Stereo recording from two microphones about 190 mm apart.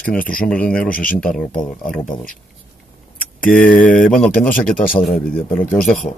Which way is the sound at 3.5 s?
45° left (ahead or behind).